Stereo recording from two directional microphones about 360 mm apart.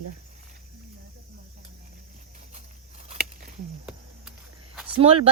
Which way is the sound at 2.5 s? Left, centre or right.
Centre.